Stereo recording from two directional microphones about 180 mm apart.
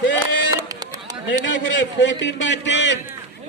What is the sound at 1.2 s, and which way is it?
A man's voice, 90° left.